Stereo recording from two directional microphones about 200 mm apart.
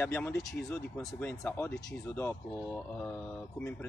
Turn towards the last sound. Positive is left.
turn(degrees=10)  # may be behind; listen again after turning